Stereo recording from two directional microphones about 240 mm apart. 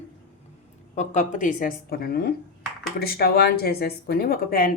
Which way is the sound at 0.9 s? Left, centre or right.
Left.